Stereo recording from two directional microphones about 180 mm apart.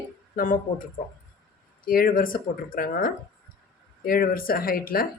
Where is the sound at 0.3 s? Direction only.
50° left (ahead or behind).